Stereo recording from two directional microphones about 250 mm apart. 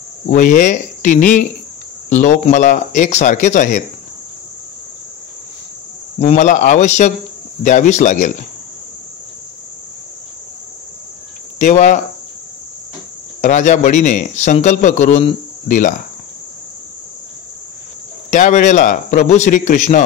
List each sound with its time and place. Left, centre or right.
0.3 s speech: left
6.1 s speech: left
11.5 s cricket: left
13.4 s speech: left
18.3 s speech: left